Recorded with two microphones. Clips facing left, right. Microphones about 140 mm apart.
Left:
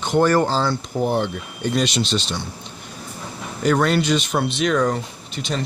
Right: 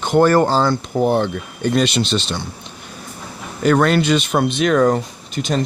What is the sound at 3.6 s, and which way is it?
Speech, 65° right (ahead or behind).